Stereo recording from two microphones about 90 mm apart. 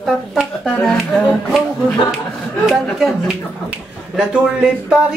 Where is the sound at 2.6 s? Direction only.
5° right (ahead or behind).